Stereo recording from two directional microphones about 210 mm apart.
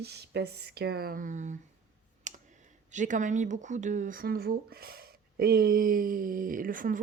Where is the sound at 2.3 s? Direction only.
35° right (ahead or behind).